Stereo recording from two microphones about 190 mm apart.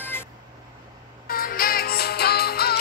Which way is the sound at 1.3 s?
50° left (ahead or behind).